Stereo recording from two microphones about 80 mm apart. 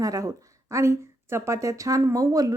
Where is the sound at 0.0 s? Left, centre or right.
Right.